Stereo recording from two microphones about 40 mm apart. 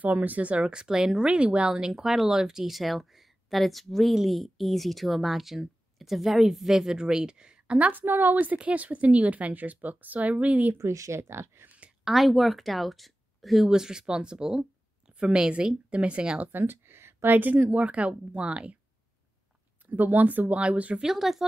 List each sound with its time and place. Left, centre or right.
0.0 s speech: right
0.5 s speech: right
1.7 s a woman's voice: centre
7.9 s speech: right
8.5 s a woman's voice: right
10.7 s speech: right
12.0 s speech: centre
13.7 s speech: centre
15.9 s a woman's voice: right
16.5 s a sound: right
17.4 s a woman's voice: right
19.9 s a woman's voice: right
21.0 s speech: centre